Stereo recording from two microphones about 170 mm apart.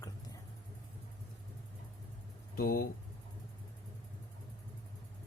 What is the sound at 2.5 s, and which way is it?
Speech, 60° left (ahead or behind).